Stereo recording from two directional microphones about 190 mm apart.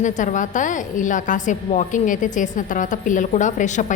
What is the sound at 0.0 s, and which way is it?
A woman's voice, 40° left (ahead or behind).